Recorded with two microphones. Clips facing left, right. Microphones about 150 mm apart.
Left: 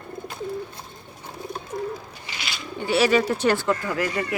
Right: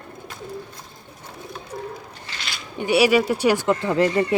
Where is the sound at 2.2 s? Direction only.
10° left (ahead or behind).